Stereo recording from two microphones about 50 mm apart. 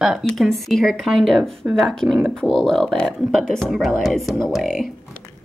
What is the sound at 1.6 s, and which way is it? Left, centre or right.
Speech, right.